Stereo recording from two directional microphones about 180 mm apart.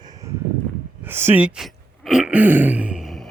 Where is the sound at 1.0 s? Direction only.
10° right (ahead or behind).